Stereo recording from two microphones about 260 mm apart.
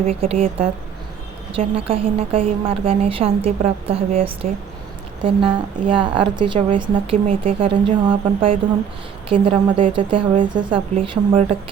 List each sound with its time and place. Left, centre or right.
0.0 s speech: right